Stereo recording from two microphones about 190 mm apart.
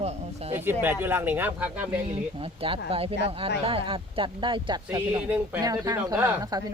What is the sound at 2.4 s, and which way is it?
Speech, 30° right (ahead or behind).